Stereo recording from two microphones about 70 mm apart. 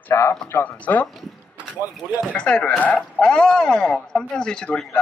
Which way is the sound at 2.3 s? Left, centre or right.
Centre.